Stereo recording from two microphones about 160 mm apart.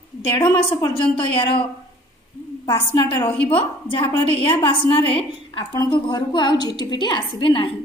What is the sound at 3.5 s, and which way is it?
A woman's voice, 35° left (ahead or behind).